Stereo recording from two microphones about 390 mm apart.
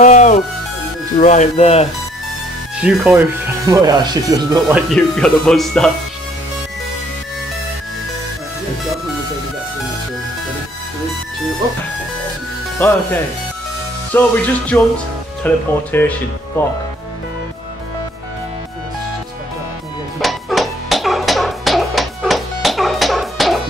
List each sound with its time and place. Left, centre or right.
0.0 s speech: centre
2.8 s speech: centre
12.7 s speech: centre
20.2 s music: centre